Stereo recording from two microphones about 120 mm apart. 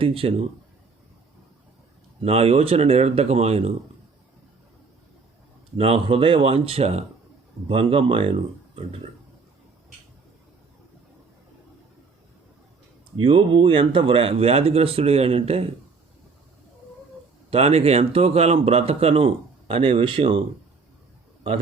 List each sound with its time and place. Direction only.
0.0 s speech: 50° right (ahead or behind)
2.2 s speech: 55° right (ahead or behind)
5.7 s speech: 55° right (ahead or behind)
13.1 s speech: 45° right (ahead or behind)
17.5 s speech: 60° right (ahead or behind)